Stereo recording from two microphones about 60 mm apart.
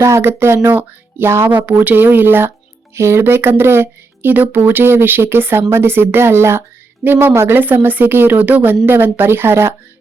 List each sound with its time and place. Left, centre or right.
0.0 s speech: right
1.5 s speech: right